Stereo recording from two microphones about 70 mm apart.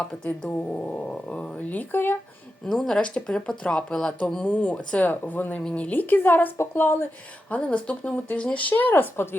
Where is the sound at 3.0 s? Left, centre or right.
Centre; by 7.1 s left.